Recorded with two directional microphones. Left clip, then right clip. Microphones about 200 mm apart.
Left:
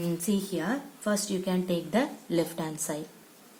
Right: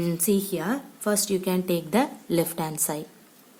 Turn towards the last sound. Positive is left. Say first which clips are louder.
# right 4 dB
turn(degrees=-55)  # may be behind; listen again after turning